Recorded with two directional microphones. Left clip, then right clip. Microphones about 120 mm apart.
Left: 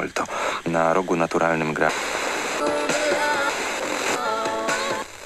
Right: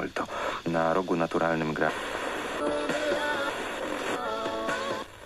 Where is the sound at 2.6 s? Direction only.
30° left (ahead or behind).